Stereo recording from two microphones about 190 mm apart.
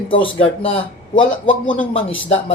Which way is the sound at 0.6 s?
30° left (ahead or behind).